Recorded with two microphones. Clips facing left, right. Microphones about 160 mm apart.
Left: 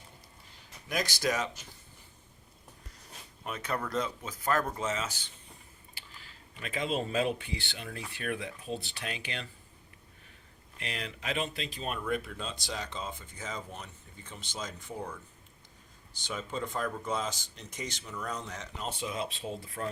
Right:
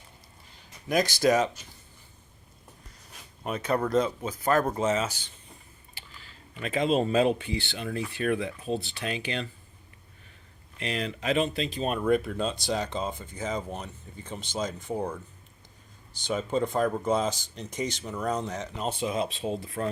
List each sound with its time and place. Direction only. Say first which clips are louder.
0.9 s speech: right 8 dB; 35° right (ahead or behind)
3.4 s speech: right 7 dB; 25° right (ahead or behind)
3.8 s speech: right 9 dB; 35° right (ahead or behind)
6.6 s speech: right 8 dB; 25° right (ahead or behind)
10.8 s speech: right 8 dB; 30° right (ahead or behind)
11.9 s speech: right 10 dB; 40° right (ahead or behind)
16.4 s speech: right 8 dB; 30° right (ahead or behind)
18.9 s speech: right 7 dB; 20° right (ahead or behind)